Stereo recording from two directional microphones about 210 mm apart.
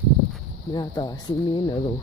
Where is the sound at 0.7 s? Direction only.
20° left (ahead or behind).